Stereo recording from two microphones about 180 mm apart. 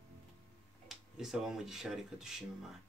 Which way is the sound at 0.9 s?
Centre (ahead or behind).